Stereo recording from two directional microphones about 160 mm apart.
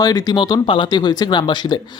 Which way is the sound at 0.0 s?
25° left (ahead or behind).